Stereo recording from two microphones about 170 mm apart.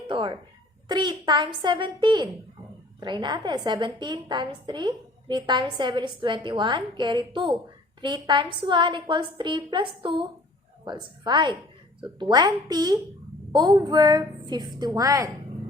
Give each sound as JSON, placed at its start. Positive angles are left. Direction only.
{"t": 0.1, "sound": "a woman's voice", "side_deg": -30}